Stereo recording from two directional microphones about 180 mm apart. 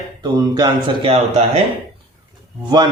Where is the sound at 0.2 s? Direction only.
20° right (ahead or behind).